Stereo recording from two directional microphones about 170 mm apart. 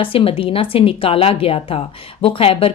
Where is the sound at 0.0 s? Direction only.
30° left (ahead or behind).